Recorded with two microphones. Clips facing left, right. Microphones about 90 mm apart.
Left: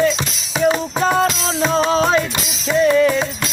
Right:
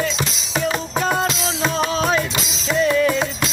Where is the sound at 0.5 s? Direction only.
Centre (ahead or behind).